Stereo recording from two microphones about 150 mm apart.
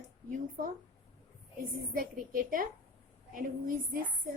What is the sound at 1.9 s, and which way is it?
A woman's voice, 65° right (ahead or behind).